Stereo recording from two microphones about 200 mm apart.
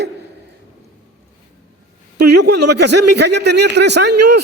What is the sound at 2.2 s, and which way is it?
A man's voice, 55° right (ahead or behind).